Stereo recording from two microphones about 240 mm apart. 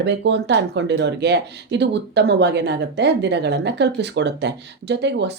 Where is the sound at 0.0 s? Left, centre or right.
Right.